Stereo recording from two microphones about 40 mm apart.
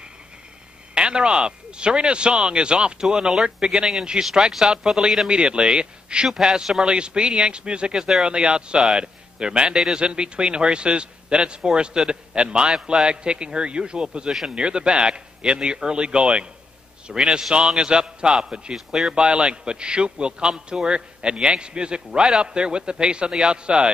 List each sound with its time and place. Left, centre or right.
0.9 s speech: right
5.3 s speech: right
8.0 s speech: centre
8.3 s speech: right